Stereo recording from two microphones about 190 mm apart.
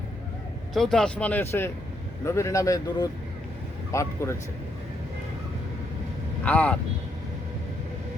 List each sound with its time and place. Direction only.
0.7 s speech: centre (ahead or behind)
6.4 s speech: 10° left (ahead or behind)